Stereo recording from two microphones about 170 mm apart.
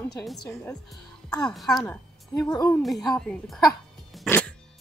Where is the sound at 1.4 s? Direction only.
5° left (ahead or behind).